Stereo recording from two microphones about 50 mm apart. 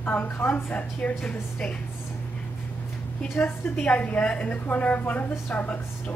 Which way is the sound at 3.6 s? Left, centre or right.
Left.